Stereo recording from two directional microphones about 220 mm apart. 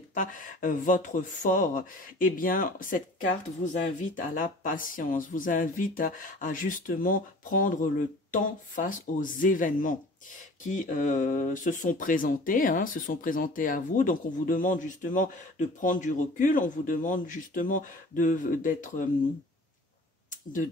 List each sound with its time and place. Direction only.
0.1 s speech: 35° left (ahead or behind)